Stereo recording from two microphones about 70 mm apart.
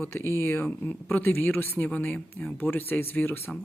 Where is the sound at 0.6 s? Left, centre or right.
Left.